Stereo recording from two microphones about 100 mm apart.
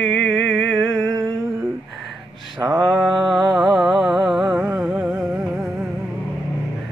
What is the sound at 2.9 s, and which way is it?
Mantra, 5° right (ahead or behind).